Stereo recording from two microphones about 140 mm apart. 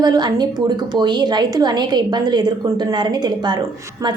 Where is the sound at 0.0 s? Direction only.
30° right (ahead or behind).